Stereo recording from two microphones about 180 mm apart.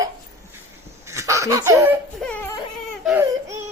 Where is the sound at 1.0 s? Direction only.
15° right (ahead or behind).